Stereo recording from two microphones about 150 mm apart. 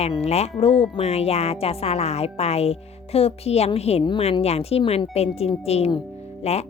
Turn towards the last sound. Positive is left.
turn(degrees=45)  # may be behind; listen again after turning